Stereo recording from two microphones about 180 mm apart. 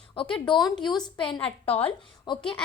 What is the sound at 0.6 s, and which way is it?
Speech, centre (ahead or behind).